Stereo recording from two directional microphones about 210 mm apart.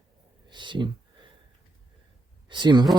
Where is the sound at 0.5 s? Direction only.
20° right (ahead or behind).